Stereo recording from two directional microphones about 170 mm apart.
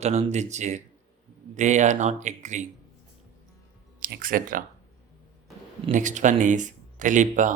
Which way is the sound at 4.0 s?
55° right (ahead or behind).